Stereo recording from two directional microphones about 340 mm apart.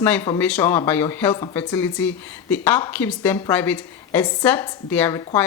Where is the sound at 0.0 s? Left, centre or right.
Centre.